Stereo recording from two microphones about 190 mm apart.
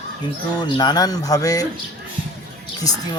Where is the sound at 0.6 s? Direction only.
25° left (ahead or behind).